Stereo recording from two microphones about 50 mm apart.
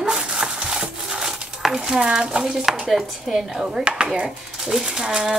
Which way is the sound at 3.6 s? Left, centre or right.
Centre.